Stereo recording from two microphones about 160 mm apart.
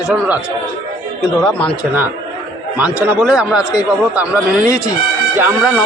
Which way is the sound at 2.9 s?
10° right (ahead or behind).